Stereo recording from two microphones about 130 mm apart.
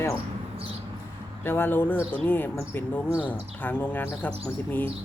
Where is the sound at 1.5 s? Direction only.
15° left (ahead or behind).